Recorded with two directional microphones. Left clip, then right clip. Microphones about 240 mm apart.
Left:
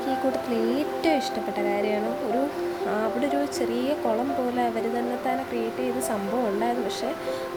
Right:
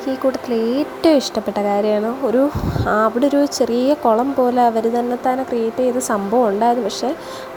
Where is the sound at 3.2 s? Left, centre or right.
Right.